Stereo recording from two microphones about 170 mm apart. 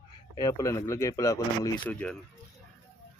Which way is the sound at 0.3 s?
20° left (ahead or behind).